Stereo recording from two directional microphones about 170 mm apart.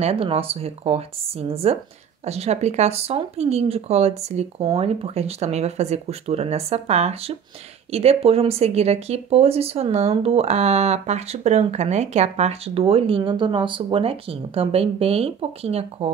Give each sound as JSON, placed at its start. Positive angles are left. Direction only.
{"t": 0.0, "sound": "speech", "side_deg": -35}